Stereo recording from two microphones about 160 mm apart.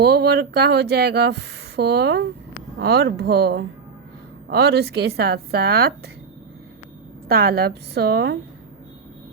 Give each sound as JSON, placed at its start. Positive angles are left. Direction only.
{"t": 0.0, "sound": "speech", "side_deg": -90}
{"t": 7.3, "sound": "a woman's voice", "side_deg": -70}